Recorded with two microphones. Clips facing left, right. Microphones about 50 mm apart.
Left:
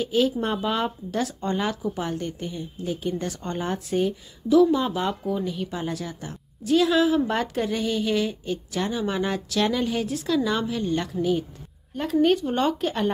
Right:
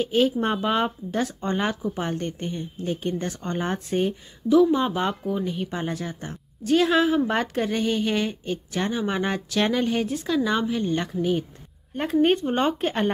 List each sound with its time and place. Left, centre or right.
0.0 s speech: right
0.6 s a woman's voice: right
2.1 s speech: right
3.2 s a woman's voice: right
10.1 s a woman's voice: centre
11.9 s speech: right